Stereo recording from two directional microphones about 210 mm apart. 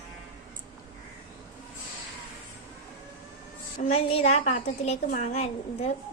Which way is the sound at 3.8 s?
30° left (ahead or behind).